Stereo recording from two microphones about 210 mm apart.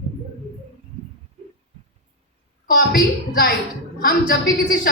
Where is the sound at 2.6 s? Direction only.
45° left (ahead or behind).